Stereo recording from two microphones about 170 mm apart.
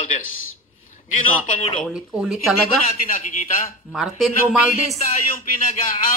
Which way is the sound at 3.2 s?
45° left (ahead or behind).